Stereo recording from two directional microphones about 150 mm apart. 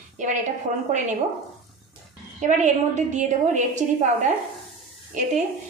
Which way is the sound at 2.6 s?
50° right (ahead or behind).